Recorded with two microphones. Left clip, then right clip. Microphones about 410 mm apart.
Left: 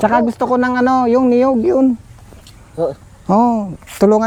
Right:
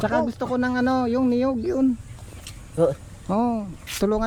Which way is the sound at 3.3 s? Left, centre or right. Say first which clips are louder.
Left 11 dB; left.